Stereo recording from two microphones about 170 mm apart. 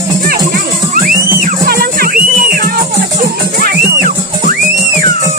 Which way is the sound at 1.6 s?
60° right (ahead or behind).